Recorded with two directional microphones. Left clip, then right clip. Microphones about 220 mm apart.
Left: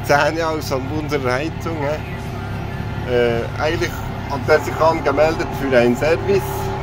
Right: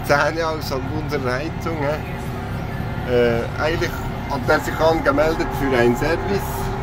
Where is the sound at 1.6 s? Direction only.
5° left (ahead or behind).